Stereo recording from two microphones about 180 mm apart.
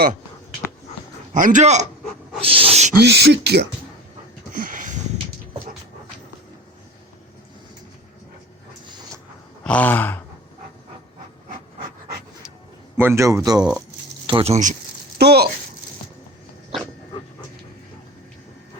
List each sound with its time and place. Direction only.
1.3 s a man's voice: 45° right (ahead or behind)
3.0 s speech: 65° right (ahead or behind)
4.5 s a sound: 50° right (ahead or behind)
9.6 s sigh: 10° left (ahead or behind)
13.0 s a man's voice: 15° right (ahead or behind)
14.3 s speech: 30° right (ahead or behind)
15.2 s speech: 65° right (ahead or behind)